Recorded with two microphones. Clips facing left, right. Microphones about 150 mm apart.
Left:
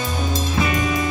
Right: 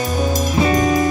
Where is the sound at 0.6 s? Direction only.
40° right (ahead or behind).